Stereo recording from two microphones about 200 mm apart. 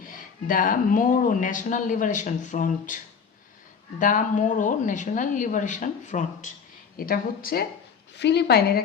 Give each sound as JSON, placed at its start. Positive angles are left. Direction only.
{"t": 0.1, "sound": "speech", "side_deg": 45}
{"t": 8.1, "sound": "a woman's voice", "side_deg": 60}